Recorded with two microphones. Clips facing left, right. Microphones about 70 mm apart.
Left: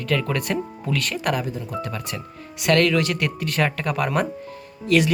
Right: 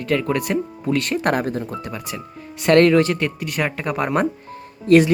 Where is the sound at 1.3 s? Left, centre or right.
Right.